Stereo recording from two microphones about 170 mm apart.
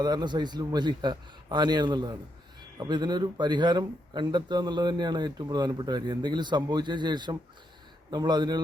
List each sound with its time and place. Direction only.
0.0 s speech: 25° right (ahead or behind)